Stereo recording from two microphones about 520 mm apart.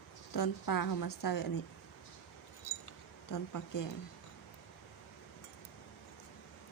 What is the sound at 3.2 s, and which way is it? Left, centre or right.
Speech, left.